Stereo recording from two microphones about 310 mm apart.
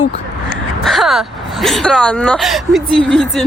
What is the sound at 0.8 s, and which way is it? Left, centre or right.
Speech, centre.